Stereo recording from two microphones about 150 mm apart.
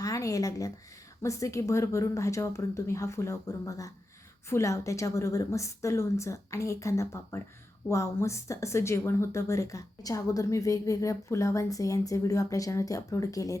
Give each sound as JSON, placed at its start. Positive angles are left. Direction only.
{"t": 0.0, "sound": "speech", "side_deg": 20}